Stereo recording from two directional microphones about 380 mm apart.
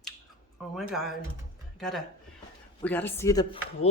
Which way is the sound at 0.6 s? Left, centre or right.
Centre.